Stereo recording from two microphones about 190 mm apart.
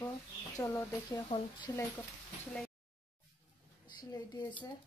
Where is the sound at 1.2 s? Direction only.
25° left (ahead or behind).